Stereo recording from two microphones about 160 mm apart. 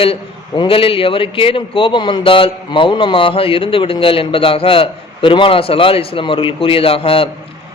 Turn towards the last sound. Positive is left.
turn(degrees=35)  # may be behind; listen again after turning